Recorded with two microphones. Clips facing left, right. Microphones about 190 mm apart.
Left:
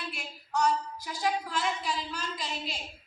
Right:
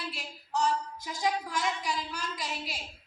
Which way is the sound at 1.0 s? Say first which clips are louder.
Even; 20° right (ahead or behind).